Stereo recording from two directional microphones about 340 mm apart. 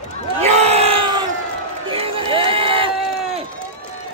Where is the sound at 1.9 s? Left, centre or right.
Centre.